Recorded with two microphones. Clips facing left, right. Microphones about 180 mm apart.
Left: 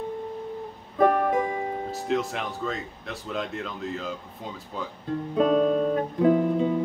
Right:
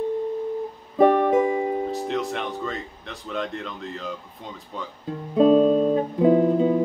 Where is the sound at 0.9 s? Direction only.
20° right (ahead or behind).